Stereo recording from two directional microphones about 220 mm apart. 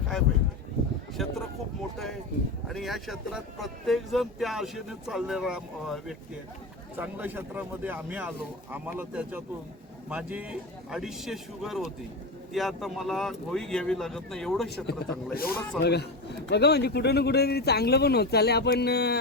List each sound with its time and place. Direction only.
1.1 s speech: centre (ahead or behind)
2.6 s speech: centre (ahead or behind)
14.8 s speech: 45° left (ahead or behind)